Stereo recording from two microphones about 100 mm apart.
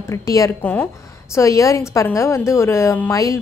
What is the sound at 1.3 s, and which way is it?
A woman's voice, 30° left (ahead or behind).